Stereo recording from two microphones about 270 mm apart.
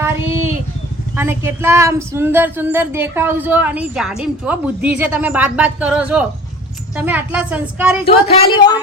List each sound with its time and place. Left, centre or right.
0.0 s a sound: centre
1.1 s a woman's voice: centre
8.0 s speech: left